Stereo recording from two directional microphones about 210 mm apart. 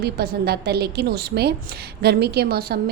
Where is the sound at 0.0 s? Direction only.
50° right (ahead or behind).